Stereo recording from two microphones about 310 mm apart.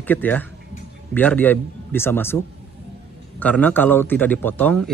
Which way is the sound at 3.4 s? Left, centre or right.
Centre.